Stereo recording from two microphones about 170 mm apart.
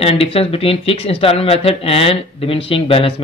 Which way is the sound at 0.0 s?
35° left (ahead or behind).